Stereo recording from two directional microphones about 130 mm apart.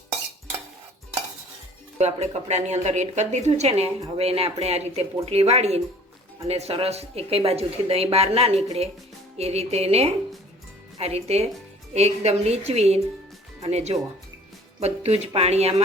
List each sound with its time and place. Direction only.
2.0 s speech: 55° right (ahead or behind)